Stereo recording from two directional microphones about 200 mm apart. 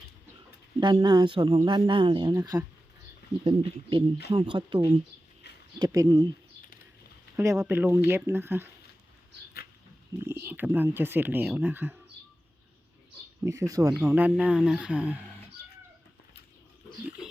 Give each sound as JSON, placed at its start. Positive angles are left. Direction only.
{"t": 0.8, "sound": "speech", "side_deg": -25}
{"t": 5.8, "sound": "speech", "side_deg": -20}
{"t": 7.3, "sound": "speech", "side_deg": -15}
{"t": 10.2, "sound": "speech", "side_deg": -10}
{"t": 13.4, "sound": "speech", "side_deg": -15}